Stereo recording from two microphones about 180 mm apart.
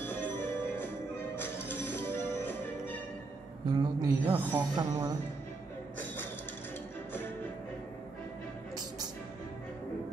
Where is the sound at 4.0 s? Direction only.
20° right (ahead or behind).